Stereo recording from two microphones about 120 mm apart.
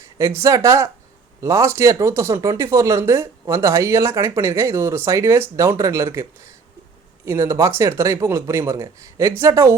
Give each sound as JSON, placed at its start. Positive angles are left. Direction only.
{"t": 0.2, "sound": "speech", "side_deg": -25}